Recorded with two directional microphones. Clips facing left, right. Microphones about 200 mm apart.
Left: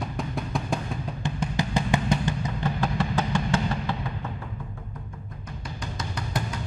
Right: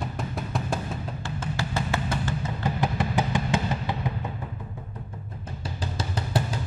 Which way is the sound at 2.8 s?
20° right (ahead or behind).